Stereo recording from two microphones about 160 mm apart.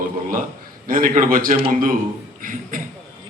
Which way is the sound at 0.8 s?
60° right (ahead or behind).